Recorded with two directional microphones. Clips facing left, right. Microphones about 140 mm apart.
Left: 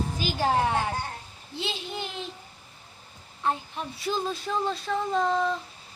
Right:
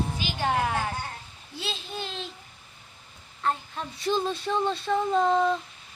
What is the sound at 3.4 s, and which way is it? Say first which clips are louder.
Speech: even; 15° left (ahead or behind).